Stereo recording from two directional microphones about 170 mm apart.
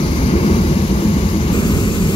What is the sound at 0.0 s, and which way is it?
Vehicle, 35° left (ahead or behind).